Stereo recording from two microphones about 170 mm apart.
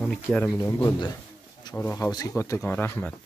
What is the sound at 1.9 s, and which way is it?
Speech, 20° left (ahead or behind).